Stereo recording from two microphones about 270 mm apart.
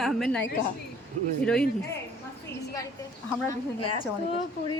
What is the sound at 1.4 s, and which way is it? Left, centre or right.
Speech, centre.